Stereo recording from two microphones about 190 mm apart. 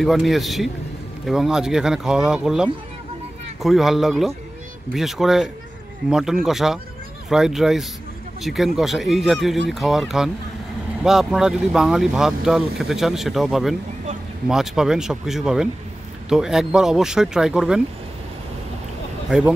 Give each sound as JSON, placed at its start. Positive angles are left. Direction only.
{"t": 0.0, "sound": "speech", "side_deg": 0}
{"t": 19.3, "sound": "speech", "side_deg": -5}